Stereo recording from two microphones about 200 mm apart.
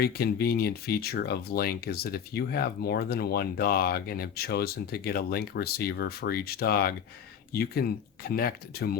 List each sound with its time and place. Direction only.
0.0 s speech: 50° left (ahead or behind)